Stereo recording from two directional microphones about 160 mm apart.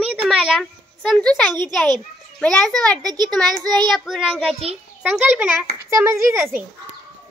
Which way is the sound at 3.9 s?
Centre (ahead or behind).